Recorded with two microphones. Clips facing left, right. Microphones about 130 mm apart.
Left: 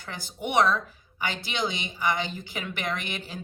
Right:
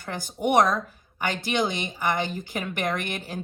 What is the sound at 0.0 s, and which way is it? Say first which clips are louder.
Speech: right 7 dB; 50° right (ahead or behind).